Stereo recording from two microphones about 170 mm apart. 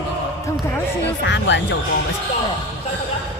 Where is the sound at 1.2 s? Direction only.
90° left.